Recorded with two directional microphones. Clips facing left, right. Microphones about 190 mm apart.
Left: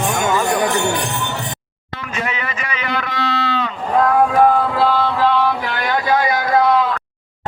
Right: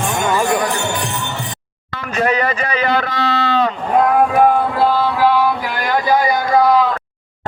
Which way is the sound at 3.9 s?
15° right (ahead or behind).